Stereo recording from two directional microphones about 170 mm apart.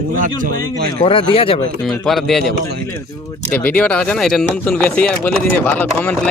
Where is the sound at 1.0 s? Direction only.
30° left (ahead or behind).